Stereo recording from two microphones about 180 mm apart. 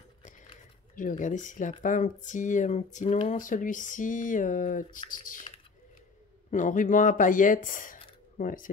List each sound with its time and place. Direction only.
0.9 s speech: 45° left (ahead or behind)
6.5 s speech: 45° left (ahead or behind)